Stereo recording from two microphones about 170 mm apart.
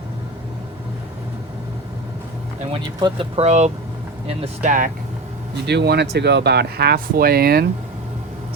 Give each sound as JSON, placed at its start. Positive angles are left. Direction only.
{"t": 3.0, "sound": "speech", "side_deg": -35}
{"t": 5.6, "sound": "speech", "side_deg": -75}